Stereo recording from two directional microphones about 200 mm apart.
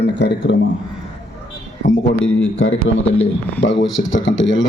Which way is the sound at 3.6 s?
65° left (ahead or behind).